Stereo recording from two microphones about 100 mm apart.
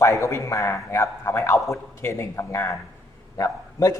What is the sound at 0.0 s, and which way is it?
A man's voice, 30° left (ahead or behind).